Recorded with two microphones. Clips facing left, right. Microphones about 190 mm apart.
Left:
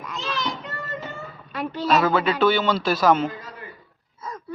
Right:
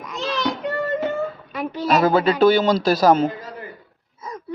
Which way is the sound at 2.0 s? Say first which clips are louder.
Right 6 dB; 35° right (ahead or behind).